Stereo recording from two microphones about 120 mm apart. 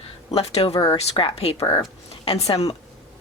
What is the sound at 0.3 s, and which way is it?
A woman's voice, 55° left (ahead or behind).